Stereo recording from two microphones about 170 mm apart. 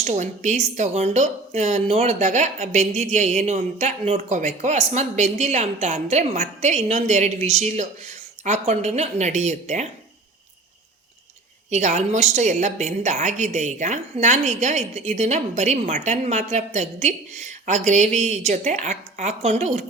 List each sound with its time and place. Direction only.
0.0 s speech: 45° right (ahead or behind)
11.7 s a woman's voice: 45° right (ahead or behind)